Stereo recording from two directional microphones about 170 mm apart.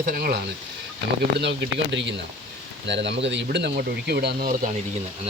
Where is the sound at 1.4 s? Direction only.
90° right; by 4.7 s 60° right (ahead or behind).